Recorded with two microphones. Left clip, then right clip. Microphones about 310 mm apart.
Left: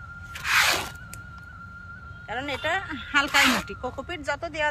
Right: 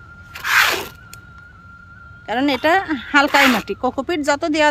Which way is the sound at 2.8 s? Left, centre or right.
Centre.